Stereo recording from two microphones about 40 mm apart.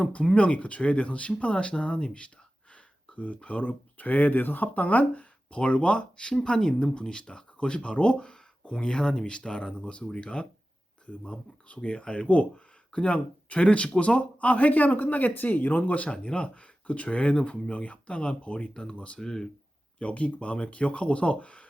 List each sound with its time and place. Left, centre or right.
0.3 s speech: left
3.2 s speech: left
16.0 s speech: left
18.7 s speech: centre
18.9 s speech: left
19.2 s speech: centre
20.0 s speech: left